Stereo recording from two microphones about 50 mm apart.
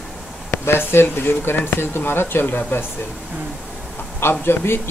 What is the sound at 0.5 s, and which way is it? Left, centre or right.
Speech, left.